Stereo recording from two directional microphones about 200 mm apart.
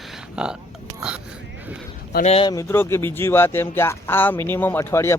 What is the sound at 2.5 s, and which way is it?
Speech, 15° left (ahead or behind).